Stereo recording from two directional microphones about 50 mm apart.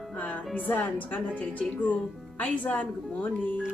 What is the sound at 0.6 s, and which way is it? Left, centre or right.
Speech, left.